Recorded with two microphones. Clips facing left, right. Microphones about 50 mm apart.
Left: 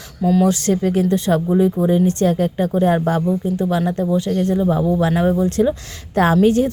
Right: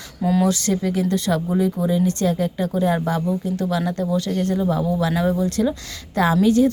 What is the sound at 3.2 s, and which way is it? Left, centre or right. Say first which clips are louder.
A woman's voice: left 4 dB; centre.